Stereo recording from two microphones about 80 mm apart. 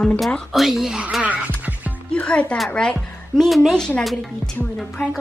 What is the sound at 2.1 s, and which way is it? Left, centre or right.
A woman's voice, centre.